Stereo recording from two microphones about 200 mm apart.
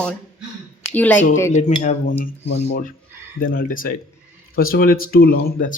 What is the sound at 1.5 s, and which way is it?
Speech, 35° left (ahead or behind).